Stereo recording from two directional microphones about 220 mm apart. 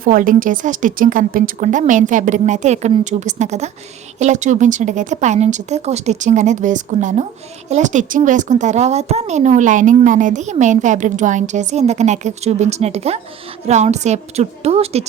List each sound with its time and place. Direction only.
0.0 s a woman's voice: 40° right (ahead or behind)